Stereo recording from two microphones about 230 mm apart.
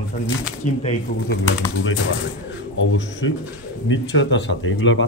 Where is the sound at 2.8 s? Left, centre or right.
Left.